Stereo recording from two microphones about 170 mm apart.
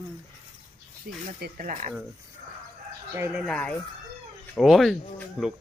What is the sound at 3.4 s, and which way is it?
Speech, 5° left (ahead or behind).